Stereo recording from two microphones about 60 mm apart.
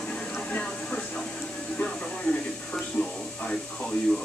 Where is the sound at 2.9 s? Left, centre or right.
Centre.